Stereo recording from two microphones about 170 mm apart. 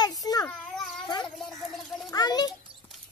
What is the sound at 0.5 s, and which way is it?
Cat, 5° left (ahead or behind).